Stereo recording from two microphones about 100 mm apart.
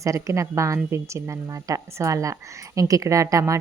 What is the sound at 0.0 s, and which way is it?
Speech, 30° right (ahead or behind).